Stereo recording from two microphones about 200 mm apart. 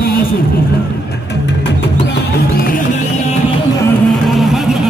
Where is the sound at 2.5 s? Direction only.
45° left (ahead or behind).